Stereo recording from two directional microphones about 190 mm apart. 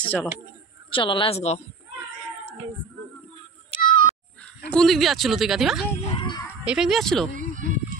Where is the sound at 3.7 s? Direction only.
25° left (ahead or behind).